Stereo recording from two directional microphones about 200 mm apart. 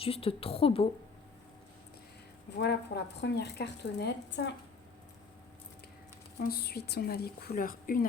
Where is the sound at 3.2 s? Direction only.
55° left (ahead or behind).